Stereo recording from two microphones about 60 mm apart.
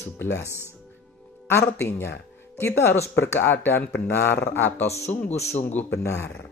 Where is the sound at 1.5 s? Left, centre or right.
Left.